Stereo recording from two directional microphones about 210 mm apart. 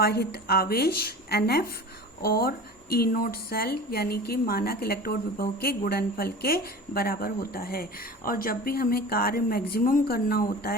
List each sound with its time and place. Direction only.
0.0 s speech: 45° left (ahead or behind)